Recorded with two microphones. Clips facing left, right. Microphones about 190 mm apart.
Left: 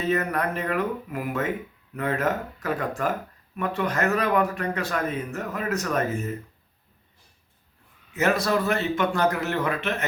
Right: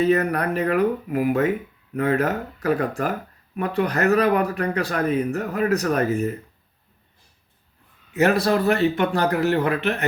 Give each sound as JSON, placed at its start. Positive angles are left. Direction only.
{"t": 0.1, "sound": "speech", "side_deg": -35}
{"t": 2.0, "sound": "speech", "side_deg": -40}
{"t": 8.2, "sound": "speech", "side_deg": -35}